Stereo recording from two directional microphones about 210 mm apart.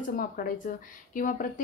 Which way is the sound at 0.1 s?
40° left (ahead or behind).